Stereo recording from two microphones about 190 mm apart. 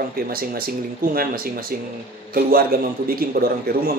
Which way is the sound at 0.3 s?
50° right (ahead or behind).